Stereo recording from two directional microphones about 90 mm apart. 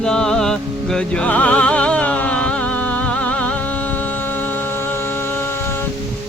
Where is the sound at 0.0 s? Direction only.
10° left (ahead or behind).